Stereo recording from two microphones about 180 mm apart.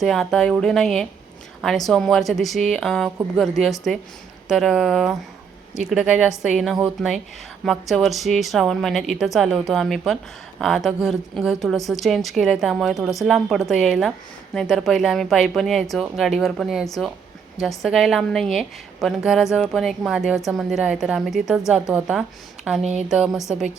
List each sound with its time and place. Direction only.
0.0 s a woman's voice: centre (ahead or behind)